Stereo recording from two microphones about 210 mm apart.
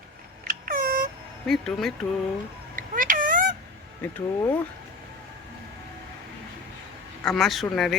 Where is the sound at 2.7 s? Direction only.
40° right (ahead or behind).